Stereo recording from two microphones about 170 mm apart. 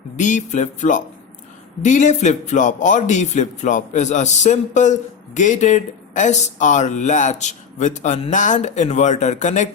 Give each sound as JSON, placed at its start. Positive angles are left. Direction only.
{"t": 0.2, "sound": "a man's voice", "side_deg": 45}